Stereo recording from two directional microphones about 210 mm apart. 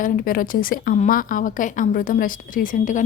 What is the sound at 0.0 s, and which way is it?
A woman's voice, 40° left (ahead or behind).